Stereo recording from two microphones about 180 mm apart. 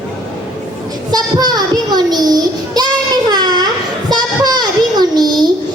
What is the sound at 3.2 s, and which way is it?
Baby cry, 25° right (ahead or behind).